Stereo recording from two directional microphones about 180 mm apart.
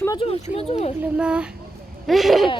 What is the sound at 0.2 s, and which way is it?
Speech, 35° left (ahead or behind).